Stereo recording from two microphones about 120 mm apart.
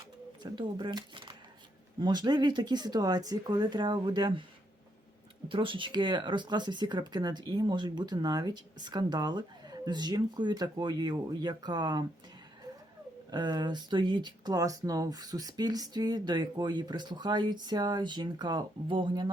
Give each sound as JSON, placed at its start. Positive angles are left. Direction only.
{"t": 0.4, "sound": "speech", "side_deg": -40}
{"t": 5.5, "sound": "speech", "side_deg": -45}
{"t": 13.3, "sound": "speech", "side_deg": -35}